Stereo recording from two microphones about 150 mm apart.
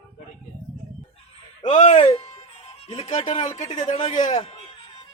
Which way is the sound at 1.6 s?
50° left (ahead or behind).